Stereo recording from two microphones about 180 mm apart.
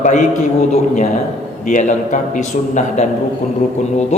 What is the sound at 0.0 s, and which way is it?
A man's voice, 40° left (ahead or behind).